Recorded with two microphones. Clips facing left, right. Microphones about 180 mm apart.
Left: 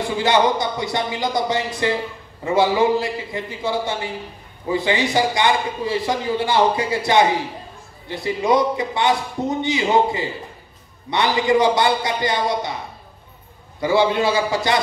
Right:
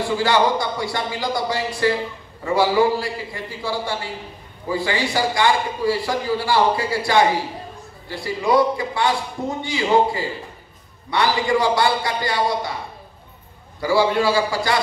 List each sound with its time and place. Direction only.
0.0 s a man's voice: 20° left (ahead or behind)
13.7 s a man's voice: 20° left (ahead or behind)